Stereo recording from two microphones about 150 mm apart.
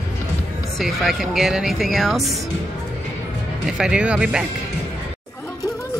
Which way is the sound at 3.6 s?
5° right (ahead or behind).